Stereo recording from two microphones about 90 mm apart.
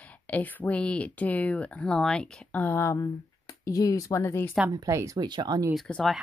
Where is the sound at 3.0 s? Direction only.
40° left (ahead or behind).